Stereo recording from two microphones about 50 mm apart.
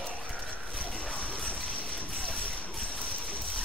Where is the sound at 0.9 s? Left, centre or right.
Left.